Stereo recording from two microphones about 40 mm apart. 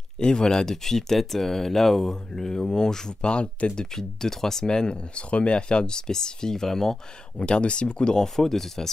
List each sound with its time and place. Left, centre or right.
0.2 s speech: centre
3.9 s speech: centre
7.3 s speech: left; by 8.9 s centre